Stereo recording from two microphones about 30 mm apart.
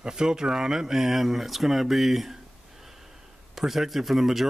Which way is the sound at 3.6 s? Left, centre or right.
Centre.